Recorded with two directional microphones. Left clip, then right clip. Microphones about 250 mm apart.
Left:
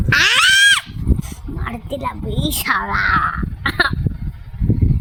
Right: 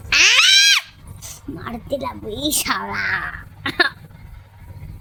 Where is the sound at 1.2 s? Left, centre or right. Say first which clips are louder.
Left 2 dB; centre.